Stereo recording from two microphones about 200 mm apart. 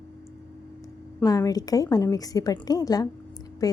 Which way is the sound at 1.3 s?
20° left (ahead or behind).